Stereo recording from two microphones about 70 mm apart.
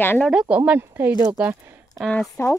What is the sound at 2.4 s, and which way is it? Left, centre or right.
Speech, left.